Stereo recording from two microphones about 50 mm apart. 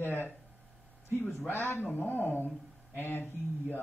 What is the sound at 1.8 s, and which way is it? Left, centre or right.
Speech, left.